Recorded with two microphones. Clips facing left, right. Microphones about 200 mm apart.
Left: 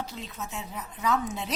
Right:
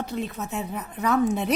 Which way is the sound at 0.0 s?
60° right (ahead or behind).